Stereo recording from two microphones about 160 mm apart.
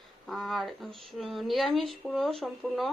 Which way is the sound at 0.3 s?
Centre (ahead or behind).